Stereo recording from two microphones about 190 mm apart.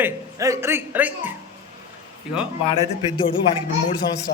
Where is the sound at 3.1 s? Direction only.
25° left (ahead or behind).